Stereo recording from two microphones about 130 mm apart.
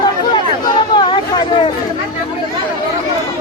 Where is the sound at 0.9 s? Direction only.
35° left (ahead or behind).